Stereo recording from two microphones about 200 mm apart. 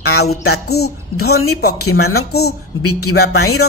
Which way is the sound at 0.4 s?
55° left (ahead or behind).